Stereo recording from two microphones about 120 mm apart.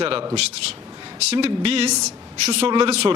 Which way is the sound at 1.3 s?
55° right (ahead or behind).